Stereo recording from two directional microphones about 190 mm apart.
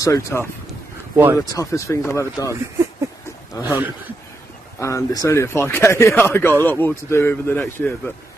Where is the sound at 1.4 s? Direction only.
20° left (ahead or behind).